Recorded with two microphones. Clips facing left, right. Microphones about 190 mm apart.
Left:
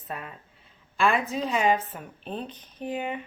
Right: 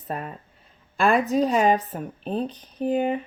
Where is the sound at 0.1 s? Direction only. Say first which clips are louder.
Right 6 dB; 45° right (ahead or behind).